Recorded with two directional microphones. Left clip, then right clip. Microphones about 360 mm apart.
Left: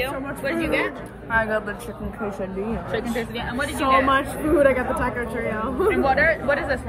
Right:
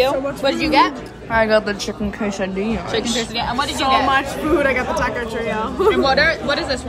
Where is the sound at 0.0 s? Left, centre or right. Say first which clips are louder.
Right 9 dB; centre.